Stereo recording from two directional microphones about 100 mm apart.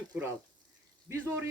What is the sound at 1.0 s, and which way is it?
Speech, 25° right (ahead or behind).